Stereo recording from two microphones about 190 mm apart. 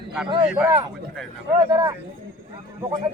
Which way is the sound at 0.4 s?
5° right (ahead or behind).